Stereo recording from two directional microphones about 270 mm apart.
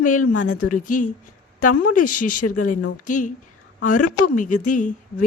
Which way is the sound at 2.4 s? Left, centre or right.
Left.